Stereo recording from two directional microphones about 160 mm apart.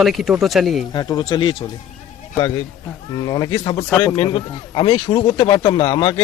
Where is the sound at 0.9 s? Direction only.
25° left (ahead or behind).